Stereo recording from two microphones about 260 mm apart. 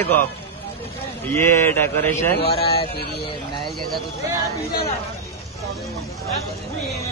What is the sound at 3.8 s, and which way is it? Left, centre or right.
Speech, centre.